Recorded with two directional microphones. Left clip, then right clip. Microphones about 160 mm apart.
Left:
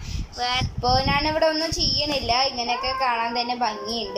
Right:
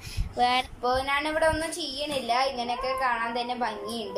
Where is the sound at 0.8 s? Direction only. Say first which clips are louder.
Left 5 dB; 5° left (ahead or behind).